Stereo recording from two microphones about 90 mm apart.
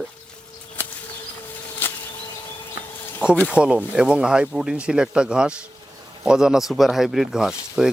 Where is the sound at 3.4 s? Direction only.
10° right (ahead or behind).